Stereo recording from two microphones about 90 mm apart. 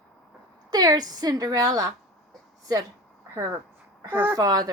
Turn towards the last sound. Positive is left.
turn(degrees=-45)  # may be behind; listen again after turning